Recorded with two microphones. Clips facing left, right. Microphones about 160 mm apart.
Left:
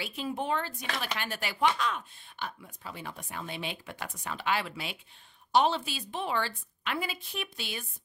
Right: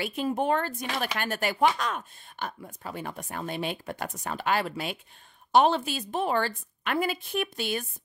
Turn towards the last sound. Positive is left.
turn(degrees=-50)  # may be behind; listen again after turning